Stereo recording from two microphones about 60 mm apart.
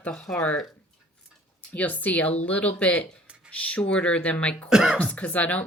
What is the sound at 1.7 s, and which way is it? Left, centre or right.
A woman's voice, left.